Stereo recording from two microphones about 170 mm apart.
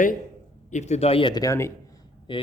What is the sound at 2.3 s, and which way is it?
Speech, 30° left (ahead or behind).